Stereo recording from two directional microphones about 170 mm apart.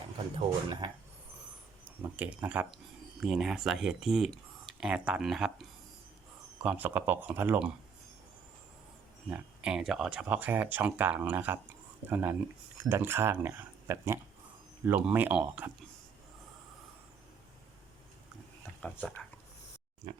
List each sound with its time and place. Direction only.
0.3 s speech: 25° right (ahead or behind)
2.0 s speech: 10° right (ahead or behind)
9.3 s speech: 5° right (ahead or behind)
18.8 s speech: 5° left (ahead or behind)